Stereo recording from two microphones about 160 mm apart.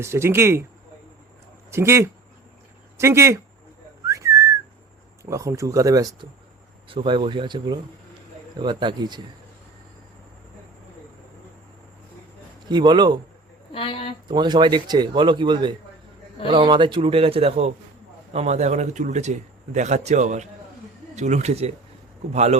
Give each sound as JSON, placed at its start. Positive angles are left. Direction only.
{"t": 0.0, "sound": "speech", "side_deg": -15}
{"t": 1.7, "sound": "speech", "side_deg": -15}
{"t": 4.0, "sound": "whistling", "side_deg": -20}
{"t": 5.2, "sound": "speech", "side_deg": -20}
{"t": 6.8, "sound": "a man's voice", "side_deg": -35}
{"t": 12.6, "sound": "speech", "side_deg": -25}
{"t": 13.7, "sound": "speech", "side_deg": 35}
{"t": 14.3, "sound": "a man's voice", "side_deg": -30}